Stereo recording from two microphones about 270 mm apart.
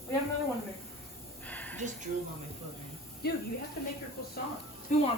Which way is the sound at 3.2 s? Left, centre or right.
Left.